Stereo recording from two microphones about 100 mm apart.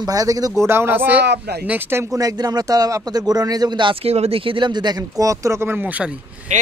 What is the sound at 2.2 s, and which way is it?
Speech, 40° right (ahead or behind).